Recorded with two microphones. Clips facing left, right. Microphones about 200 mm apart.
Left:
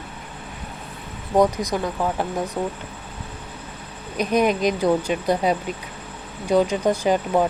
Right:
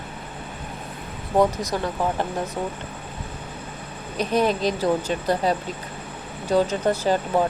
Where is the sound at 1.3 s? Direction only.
15° left (ahead or behind).